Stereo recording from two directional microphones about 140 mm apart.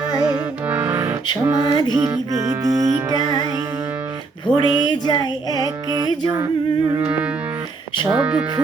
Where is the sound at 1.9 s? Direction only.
30° right (ahead or behind).